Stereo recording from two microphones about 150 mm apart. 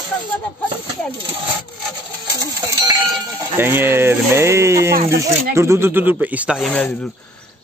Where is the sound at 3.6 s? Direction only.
15° right (ahead or behind).